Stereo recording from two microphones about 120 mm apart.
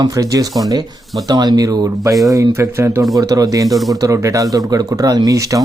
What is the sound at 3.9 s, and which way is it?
Speech, 30° right (ahead or behind).